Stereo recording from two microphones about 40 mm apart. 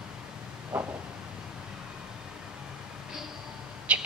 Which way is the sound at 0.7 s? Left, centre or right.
Right.